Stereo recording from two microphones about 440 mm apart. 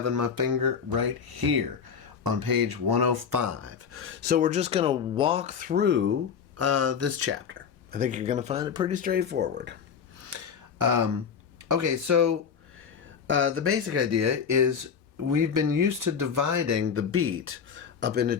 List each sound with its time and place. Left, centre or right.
0.0 s speech: right
10.2 s a sound: right
11.7 s speech: right
13.2 s speech: right